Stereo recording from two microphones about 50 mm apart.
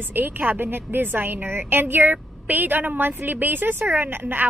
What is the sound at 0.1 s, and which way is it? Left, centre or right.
A woman's voice, right.